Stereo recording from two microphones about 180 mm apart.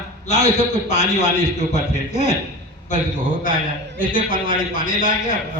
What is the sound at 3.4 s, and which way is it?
A man's voice, 50° left (ahead or behind).